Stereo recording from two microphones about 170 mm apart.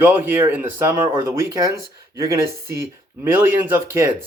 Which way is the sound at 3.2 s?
15° right (ahead or behind).